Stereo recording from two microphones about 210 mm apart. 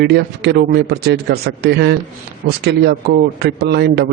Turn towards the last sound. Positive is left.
turn(degrees=-55)  # may be behind; listen again after turning